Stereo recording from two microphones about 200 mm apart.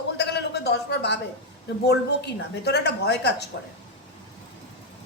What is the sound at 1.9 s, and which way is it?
A woman's voice, 55° left (ahead or behind).